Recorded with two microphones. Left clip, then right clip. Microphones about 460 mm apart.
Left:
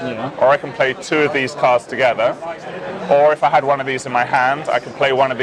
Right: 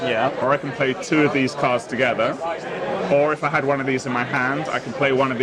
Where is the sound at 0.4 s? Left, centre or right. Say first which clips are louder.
Left 6 dB; left.